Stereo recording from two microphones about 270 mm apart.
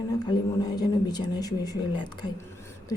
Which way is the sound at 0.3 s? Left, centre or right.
Centre.